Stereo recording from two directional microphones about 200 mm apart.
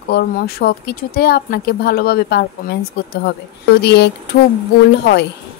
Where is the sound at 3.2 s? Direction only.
55° left (ahead or behind).